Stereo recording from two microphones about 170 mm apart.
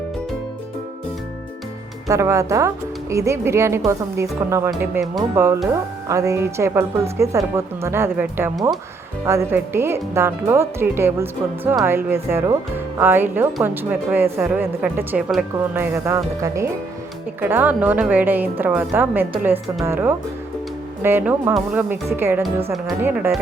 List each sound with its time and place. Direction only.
2.0 s speech: 15° right (ahead or behind)